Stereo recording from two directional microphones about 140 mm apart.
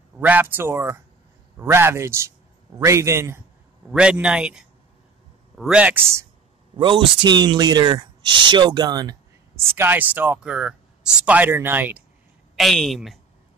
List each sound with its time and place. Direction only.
0.2 s a man's voice: 10° right (ahead or behind)
3.9 s speech: 5° right (ahead or behind)
6.8 s speech: 35° right (ahead or behind)
9.8 s speech: 15° right (ahead or behind)
12.5 s speech: centre (ahead or behind)